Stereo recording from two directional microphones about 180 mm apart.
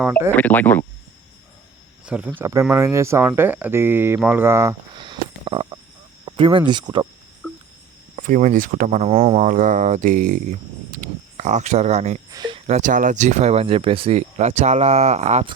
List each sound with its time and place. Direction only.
0.3 s speech: 10° left (ahead or behind)
2.0 s speech: 10° right (ahead or behind)
5.0 s sniff: 30° right (ahead or behind)
6.2 s speech: 30° right (ahead or behind)
8.1 s speech: 45° right (ahead or behind)
9.5 s speech: 45° right (ahead or behind)
12.3 s a sound: 25° right (ahead or behind)
12.6 s speech: 40° right (ahead or behind)